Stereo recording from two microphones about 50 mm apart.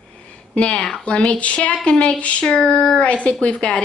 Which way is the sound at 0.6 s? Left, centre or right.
Left.